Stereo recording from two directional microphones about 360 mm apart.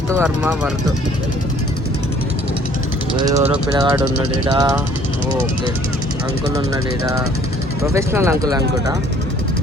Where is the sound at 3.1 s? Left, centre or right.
Centre.